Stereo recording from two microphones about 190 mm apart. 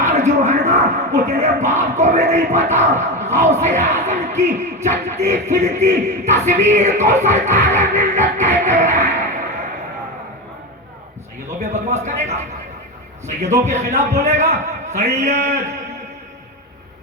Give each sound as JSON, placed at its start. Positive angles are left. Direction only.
{"t": 0.0, "sound": "speech", "side_deg": -40}
{"t": 11.6, "sound": "speech", "side_deg": -40}
{"t": 13.7, "sound": "speech", "side_deg": -35}